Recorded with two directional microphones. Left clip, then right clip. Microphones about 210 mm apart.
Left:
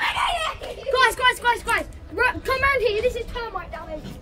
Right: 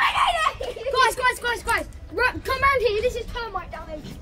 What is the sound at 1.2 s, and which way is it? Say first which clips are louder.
A child's voice: left 3 dB; 10° right (ahead or behind).